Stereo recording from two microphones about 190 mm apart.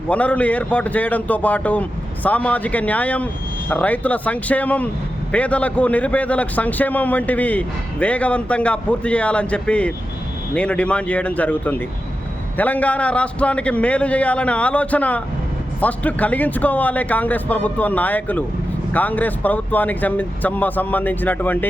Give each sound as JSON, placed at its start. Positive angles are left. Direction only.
{"t": 0.1, "sound": "a man's voice", "side_deg": 5}